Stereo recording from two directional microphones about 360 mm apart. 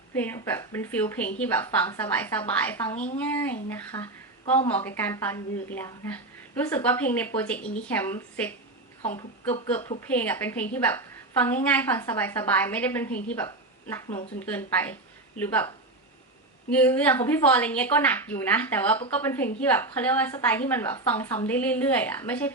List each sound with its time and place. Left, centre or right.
0.1 s a woman's voice: centre
2.9 s speech: centre
3.2 s a woman's voice: centre